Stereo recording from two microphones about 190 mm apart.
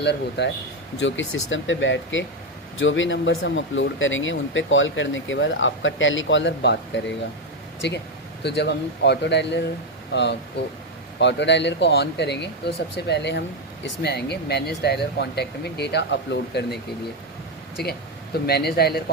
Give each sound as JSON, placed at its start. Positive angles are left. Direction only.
{"t": 0.0, "sound": "speech", "side_deg": 65}
{"t": 0.9, "sound": "speech", "side_deg": 75}